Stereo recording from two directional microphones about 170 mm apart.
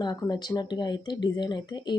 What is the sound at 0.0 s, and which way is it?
A woman's voice, 25° left (ahead or behind).